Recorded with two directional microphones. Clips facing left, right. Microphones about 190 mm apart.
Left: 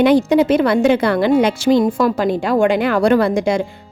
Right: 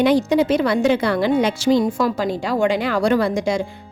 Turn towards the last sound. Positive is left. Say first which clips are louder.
# left 4 dB
turn(degrees=60)  # may be behind; listen again after turning